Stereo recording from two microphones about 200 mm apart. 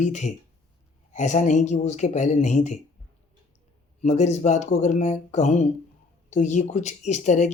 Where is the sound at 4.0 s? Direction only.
35° left (ahead or behind).